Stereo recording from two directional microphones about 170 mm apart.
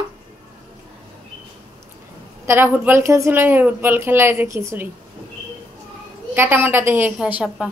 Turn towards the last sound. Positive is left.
turn(degrees=-5)  # may be behind; listen again after turning